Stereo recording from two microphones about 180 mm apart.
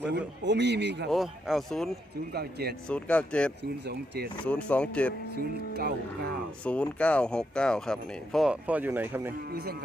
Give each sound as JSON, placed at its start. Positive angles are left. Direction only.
{"t": 0.4, "sound": "a man's voice", "side_deg": -75}
{"t": 1.1, "sound": "speech", "side_deg": 0}
{"t": 2.3, "sound": "speech", "side_deg": -65}
{"t": 2.8, "sound": "speech", "side_deg": 5}
{"t": 3.6, "sound": "a man's voice", "side_deg": -65}
{"t": 4.4, "sound": "speech", "side_deg": 5}
{"t": 5.3, "sound": "speech", "side_deg": -65}
{"t": 6.7, "sound": "speech", "side_deg": 5}